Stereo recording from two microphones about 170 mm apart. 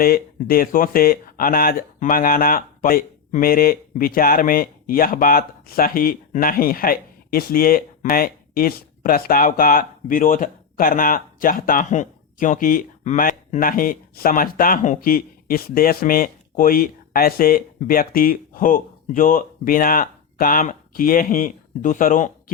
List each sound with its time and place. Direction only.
0.0 s speech: 60° left (ahead or behind)